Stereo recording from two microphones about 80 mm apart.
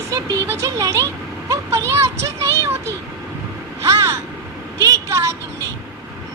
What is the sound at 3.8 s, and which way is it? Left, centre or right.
Speech, right.